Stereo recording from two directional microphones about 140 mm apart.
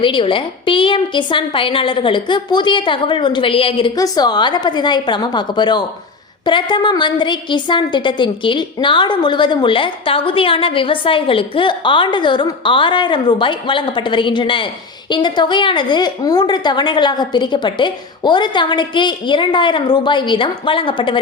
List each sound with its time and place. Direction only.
0.0 s a woman's voice: 35° left (ahead or behind)